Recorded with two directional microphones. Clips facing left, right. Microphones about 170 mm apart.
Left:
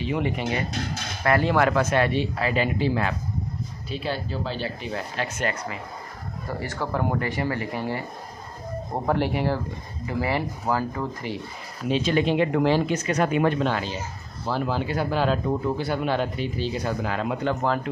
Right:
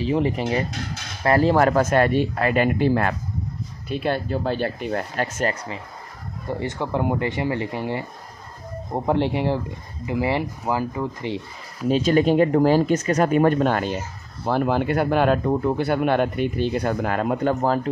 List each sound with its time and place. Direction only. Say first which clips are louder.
0.0 s speech: right 4 dB; 35° right (ahead or behind)
6.6 s speech: right 3 dB; 20° right (ahead or behind)
11.9 s speech: right 4 dB; 45° right (ahead or behind)